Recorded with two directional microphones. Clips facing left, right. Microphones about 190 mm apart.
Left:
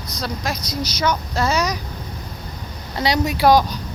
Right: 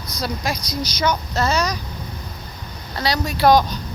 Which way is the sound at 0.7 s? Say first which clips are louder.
Left 1 dB; 5° left (ahead or behind).